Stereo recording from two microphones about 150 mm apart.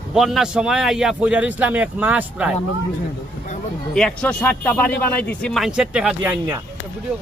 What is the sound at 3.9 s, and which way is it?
Speech, 10° left (ahead or behind).